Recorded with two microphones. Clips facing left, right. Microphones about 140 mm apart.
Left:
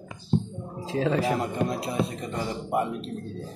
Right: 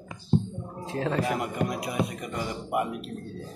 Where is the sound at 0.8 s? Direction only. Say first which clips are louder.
Left 3 dB; 75° left (ahead or behind).